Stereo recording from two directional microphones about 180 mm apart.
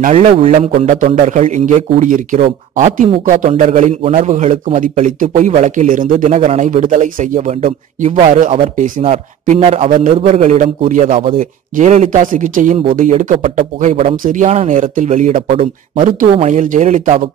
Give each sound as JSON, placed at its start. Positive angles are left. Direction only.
{"t": 0.0, "sound": "a man's voice", "side_deg": -35}
{"t": 0.8, "sound": "a man's voice", "side_deg": -45}
{"t": 15.4, "sound": "a man's voice", "side_deg": -30}
{"t": 16.3, "sound": "a man's voice", "side_deg": -40}